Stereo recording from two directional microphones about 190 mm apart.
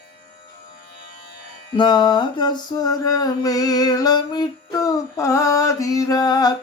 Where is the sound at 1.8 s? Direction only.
25° left (ahead or behind).